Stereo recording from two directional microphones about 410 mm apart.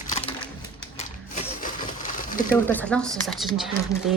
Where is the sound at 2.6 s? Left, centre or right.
Centre.